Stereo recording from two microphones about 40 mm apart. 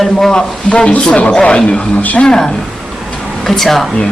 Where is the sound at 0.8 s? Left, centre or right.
Left; by 3.8 s centre.